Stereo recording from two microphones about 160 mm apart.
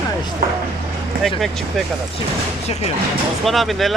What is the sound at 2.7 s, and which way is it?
Speech, 40° left (ahead or behind).